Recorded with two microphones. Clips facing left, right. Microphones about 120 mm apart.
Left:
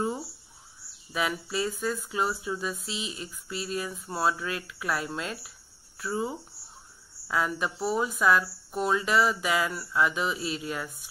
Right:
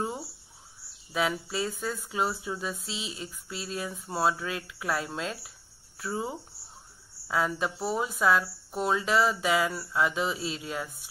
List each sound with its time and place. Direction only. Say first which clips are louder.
1.1 s speech: right 1 dB; 25° right (ahead or behind)